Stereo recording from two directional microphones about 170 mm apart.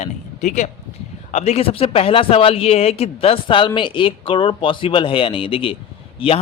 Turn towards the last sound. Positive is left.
turn(degrees=30)  # may be behind; listen again after turning